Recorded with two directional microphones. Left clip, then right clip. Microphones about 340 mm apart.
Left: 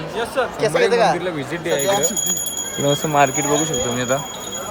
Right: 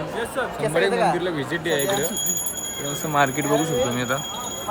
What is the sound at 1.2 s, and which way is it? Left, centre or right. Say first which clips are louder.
Speech: left 1 dB; centre.